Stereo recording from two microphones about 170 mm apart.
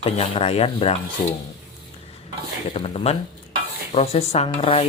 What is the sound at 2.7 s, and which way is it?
Speech, 35° left (ahead or behind).